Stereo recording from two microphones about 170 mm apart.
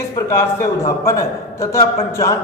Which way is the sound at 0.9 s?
20° left (ahead or behind).